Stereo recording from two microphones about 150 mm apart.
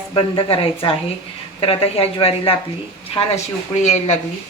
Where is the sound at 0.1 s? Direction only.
35° left (ahead or behind).